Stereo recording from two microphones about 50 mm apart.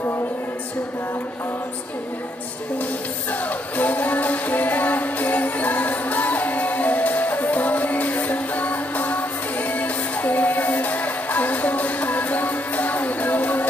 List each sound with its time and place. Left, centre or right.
2.8 s music: left